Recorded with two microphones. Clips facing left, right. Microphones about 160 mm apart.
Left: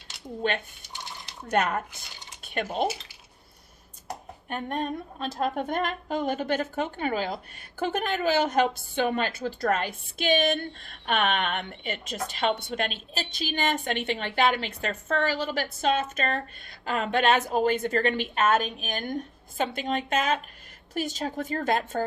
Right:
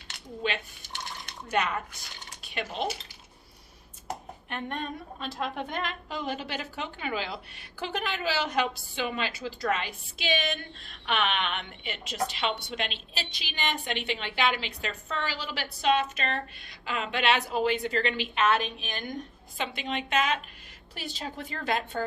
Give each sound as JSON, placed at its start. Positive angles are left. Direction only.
{"t": 0.4, "sound": "a woman's voice", "side_deg": 50}
{"t": 4.4, "sound": "a woman's voice", "side_deg": 45}